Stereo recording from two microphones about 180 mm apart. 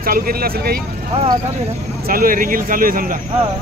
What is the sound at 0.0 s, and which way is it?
Speech, 55° right (ahead or behind).